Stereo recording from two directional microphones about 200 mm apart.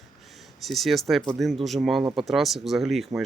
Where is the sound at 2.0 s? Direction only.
15° right (ahead or behind).